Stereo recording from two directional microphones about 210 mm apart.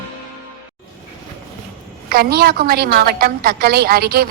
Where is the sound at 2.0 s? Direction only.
45° right (ahead or behind).